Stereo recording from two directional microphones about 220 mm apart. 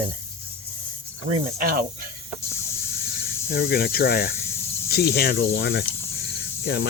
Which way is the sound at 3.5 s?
45° left (ahead or behind).